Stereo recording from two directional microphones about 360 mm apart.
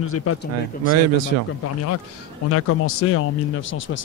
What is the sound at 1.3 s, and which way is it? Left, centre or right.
Speech, right.